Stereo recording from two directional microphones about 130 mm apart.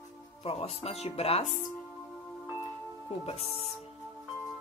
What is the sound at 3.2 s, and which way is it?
Speech, 50° left (ahead or behind).